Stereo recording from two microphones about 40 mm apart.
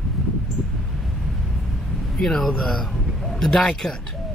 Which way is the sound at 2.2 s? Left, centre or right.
Centre.